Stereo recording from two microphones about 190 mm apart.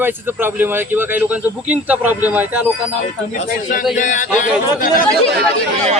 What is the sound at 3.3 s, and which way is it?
A man's voice, 40° left (ahead or behind).